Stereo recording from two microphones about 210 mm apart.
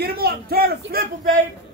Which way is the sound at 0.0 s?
50° right (ahead or behind).